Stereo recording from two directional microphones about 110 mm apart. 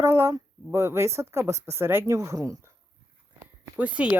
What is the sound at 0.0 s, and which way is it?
Speech, 25° right (ahead or behind).